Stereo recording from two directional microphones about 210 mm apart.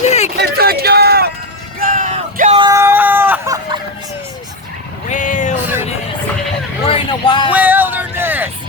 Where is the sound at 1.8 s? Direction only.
40° right (ahead or behind).